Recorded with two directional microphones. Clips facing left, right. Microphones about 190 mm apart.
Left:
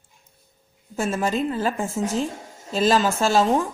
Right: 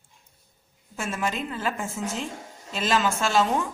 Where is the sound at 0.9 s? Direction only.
35° left (ahead or behind).